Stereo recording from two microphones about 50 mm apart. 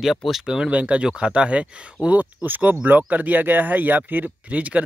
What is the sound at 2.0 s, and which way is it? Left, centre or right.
Speech, right.